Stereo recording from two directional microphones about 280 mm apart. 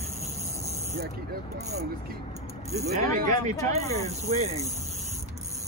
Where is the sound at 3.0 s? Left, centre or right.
Right.